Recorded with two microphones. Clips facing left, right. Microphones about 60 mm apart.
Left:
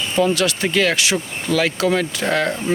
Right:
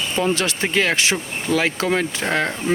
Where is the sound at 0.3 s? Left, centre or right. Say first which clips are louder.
Left 2 dB; right.